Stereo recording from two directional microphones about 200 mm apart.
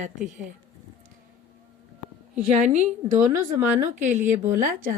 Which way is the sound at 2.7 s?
35° right (ahead or behind).